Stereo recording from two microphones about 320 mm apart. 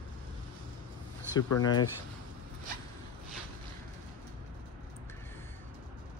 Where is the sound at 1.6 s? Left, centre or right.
Centre.